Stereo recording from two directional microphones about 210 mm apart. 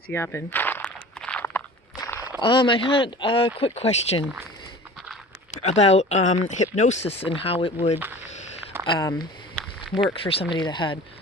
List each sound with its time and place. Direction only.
0.1 s walk: 10° left (ahead or behind)
2.4 s speech: 25° left (ahead or behind)
5.5 s speech: 30° left (ahead or behind)
9.6 s a sound: centre (ahead or behind)
10.2 s speech: 25° left (ahead or behind)